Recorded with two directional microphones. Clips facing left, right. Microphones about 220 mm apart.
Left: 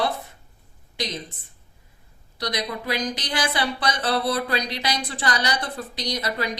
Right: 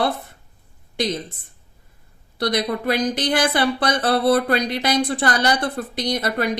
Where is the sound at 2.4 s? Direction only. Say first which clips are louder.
Right 7 dB; 55° right (ahead or behind).